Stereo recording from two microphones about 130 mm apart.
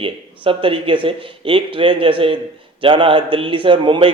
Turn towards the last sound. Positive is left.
turn(degrees=-40)  # may be behind; listen again after turning